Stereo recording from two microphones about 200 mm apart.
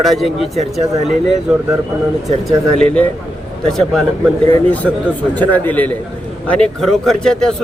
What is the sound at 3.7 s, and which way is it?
Speech, centre (ahead or behind).